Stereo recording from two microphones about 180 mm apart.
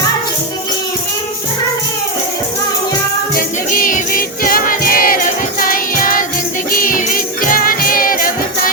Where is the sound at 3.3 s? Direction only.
50° left (ahead or behind).